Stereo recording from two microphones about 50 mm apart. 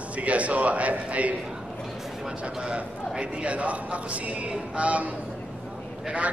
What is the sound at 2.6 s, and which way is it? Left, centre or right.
A man's voice, centre.